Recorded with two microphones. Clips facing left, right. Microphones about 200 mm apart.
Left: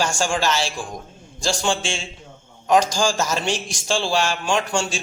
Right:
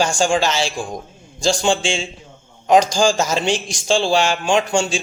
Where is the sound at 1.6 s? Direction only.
25° right (ahead or behind).